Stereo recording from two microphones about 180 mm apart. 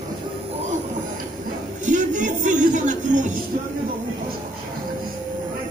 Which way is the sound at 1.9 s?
45° right (ahead or behind).